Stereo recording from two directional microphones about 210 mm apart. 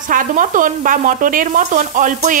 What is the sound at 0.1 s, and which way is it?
Speech, 40° right (ahead or behind).